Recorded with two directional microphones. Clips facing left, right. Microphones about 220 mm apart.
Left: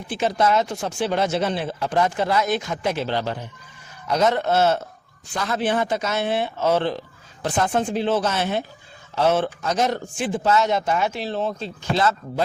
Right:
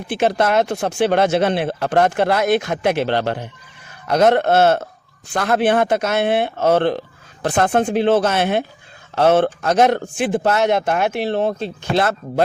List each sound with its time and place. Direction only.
0.1 s speech: 65° right (ahead or behind)